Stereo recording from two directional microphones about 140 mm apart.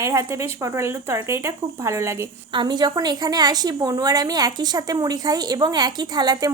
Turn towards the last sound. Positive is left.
turn(degrees=-30)  # may be behind; listen again after turning